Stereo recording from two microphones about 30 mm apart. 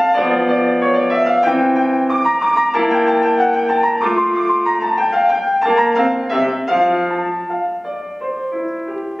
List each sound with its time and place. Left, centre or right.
0.0 s music: centre